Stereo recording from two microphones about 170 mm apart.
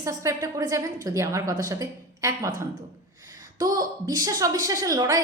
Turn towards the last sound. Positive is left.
turn(degrees=-20)  # may be behind; listen again after turning